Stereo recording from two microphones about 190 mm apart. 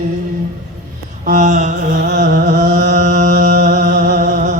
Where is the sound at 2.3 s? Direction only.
50° right (ahead or behind).